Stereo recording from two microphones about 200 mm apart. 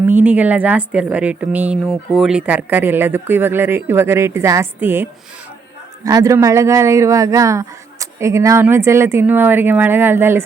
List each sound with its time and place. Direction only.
0.1 s speech: 10° right (ahead or behind)
6.1 s speech: 15° right (ahead or behind)